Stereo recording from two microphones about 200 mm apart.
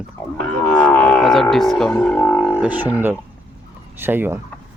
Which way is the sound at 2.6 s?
10° right (ahead or behind).